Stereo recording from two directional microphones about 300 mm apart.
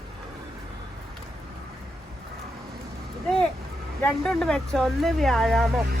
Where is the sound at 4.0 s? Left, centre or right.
Centre.